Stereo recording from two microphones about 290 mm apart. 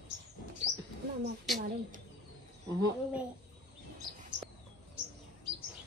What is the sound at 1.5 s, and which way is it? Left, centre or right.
Speech, right.